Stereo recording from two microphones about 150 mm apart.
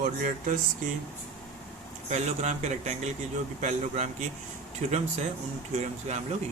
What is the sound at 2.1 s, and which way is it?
Speech, 50° right (ahead or behind).